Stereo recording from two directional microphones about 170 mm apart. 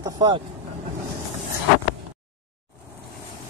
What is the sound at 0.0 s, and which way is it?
Vehicle, 25° right (ahead or behind).